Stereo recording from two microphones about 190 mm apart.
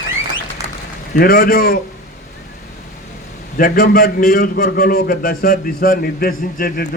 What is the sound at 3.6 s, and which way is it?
A man's voice, 50° left (ahead or behind).